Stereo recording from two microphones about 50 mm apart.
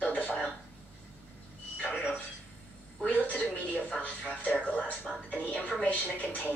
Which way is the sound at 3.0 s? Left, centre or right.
Left.